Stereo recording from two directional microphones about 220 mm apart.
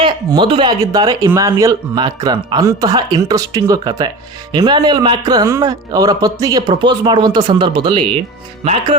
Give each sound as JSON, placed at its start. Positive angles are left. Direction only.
{"t": 0.0, "sound": "a man's voice", "side_deg": -20}